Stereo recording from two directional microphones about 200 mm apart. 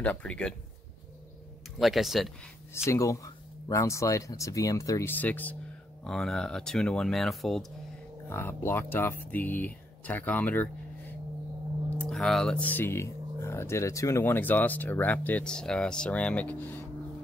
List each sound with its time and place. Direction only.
0.0 s speech: 5° left (ahead or behind)
1.8 s speech: centre (ahead or behind)
2.7 s speech: 15° left (ahead or behind)
8.3 s speech: 10° left (ahead or behind)